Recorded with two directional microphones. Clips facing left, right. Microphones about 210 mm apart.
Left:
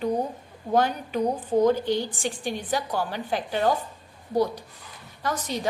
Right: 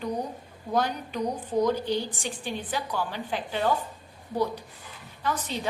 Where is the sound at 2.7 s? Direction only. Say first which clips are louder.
Left 4 dB; 40° left (ahead or behind).